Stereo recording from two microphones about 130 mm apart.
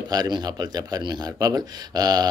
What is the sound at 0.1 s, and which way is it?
Speech, 30° right (ahead or behind).